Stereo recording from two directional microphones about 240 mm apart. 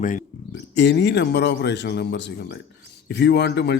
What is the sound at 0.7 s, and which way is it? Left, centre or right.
A man's voice, left.